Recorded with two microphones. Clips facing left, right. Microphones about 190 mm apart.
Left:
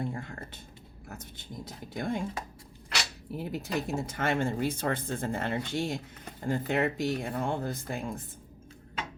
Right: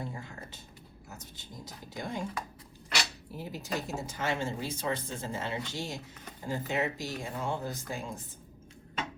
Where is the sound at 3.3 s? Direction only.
60° left (ahead or behind).